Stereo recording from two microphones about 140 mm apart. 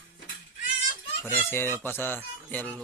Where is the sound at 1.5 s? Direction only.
15° left (ahead or behind).